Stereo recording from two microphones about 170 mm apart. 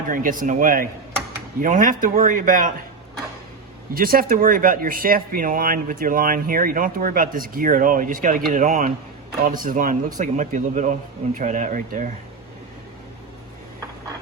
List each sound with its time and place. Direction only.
0.1 s speech: 55° right (ahead or behind)
3.9 s speech: 60° right (ahead or behind)